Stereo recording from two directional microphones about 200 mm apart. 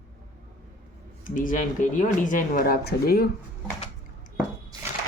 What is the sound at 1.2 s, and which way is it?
Speech, 40° left (ahead or behind).